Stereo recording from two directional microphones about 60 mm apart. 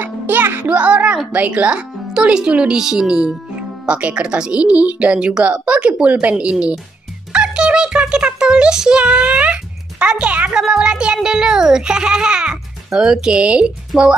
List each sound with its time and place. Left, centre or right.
0.0 s speech: right
7.3 s music: centre
10.5 s speech: centre